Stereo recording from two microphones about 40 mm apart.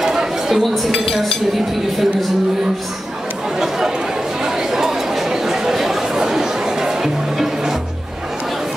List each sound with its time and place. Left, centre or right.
0.0 s a sound: centre
0.7 s speech: centre
3.5 s chatter: centre